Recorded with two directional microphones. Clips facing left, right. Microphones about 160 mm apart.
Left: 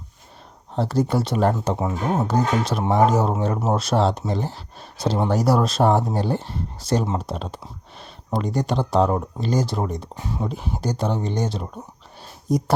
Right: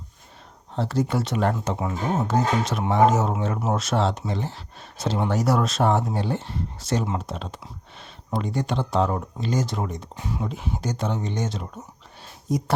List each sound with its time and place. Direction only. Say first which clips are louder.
0.8 s speech: left 3 dB; 40° left (ahead or behind)